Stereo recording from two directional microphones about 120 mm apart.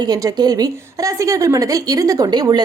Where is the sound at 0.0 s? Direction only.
30° right (ahead or behind).